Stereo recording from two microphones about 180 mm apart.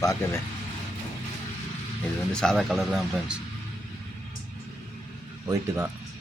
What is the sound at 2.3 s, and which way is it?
Speech, 5° left (ahead or behind).